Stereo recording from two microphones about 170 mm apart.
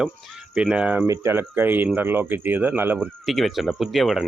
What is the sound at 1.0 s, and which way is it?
Speech, 20° right (ahead or behind).